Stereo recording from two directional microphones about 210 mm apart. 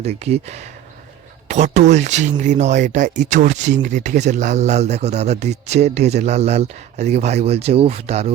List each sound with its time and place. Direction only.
0.0 s speech: 30° right (ahead or behind)